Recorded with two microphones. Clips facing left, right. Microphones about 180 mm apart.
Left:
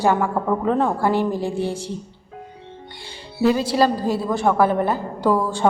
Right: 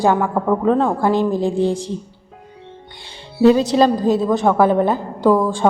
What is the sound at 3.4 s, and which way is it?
A woman's voice, 25° right (ahead or behind).